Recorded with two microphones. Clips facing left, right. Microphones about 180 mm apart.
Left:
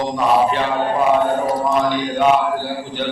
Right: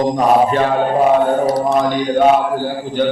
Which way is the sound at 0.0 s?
45° right (ahead or behind).